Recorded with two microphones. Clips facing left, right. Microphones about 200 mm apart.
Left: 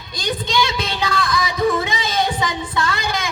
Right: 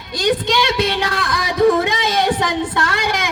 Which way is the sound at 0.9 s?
75° right (ahead or behind).